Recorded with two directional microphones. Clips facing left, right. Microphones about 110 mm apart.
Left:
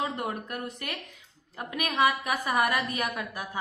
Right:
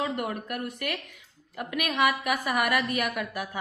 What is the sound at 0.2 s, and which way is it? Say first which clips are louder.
A woman's voice: right 2 dB; 30° left (ahead or behind).